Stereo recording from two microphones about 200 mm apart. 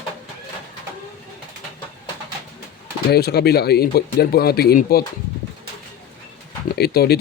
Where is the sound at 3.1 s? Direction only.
55° left (ahead or behind).